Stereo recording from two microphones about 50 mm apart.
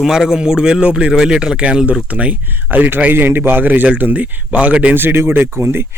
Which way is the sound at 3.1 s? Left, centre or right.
Right.